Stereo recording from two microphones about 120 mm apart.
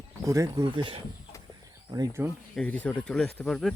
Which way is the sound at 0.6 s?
45° right (ahead or behind).